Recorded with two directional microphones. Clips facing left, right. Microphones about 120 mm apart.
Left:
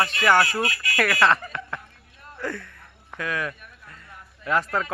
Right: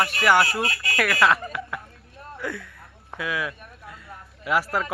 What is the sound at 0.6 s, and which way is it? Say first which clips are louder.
Speech: even; 30° right (ahead or behind).